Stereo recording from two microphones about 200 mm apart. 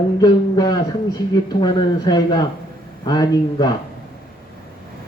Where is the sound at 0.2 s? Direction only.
20° left (ahead or behind).